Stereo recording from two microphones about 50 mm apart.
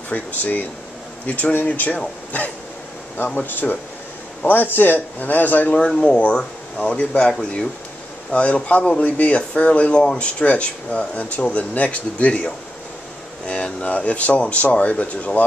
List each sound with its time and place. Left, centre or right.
0.1 s speech: left
3.3 s speech: left